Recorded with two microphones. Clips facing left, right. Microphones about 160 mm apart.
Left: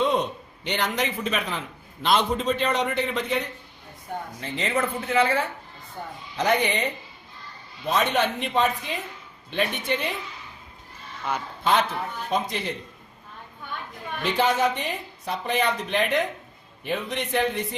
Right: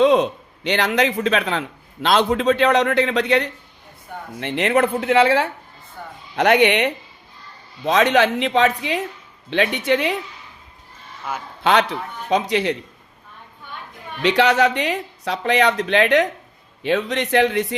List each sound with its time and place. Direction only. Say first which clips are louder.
0.0 s a man's voice: right 8 dB; 90° right; by 6.9 s 70° right (ahead or behind)
7.9 s a man's voice: right 7 dB; 90° right
8.8 s a man's voice: right 9 dB; 75° right (ahead or behind)
11.6 s speech: right 5 dB; 75° right (ahead or behind)
14.2 s a man's voice: right 6 dB; 80° right